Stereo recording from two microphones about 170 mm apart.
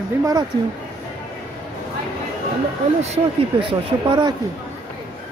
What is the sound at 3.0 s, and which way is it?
Speech, 35° right (ahead or behind).